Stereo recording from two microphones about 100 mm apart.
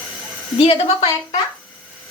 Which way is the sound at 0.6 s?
75° left (ahead or behind).